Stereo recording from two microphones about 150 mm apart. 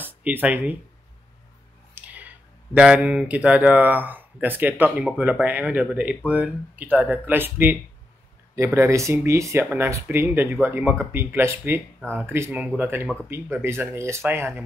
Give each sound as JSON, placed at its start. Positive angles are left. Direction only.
{"t": 0.0, "sound": "speech", "side_deg": -10}
{"t": 2.1, "sound": "speech", "side_deg": -10}
{"t": 8.7, "sound": "speech", "side_deg": -20}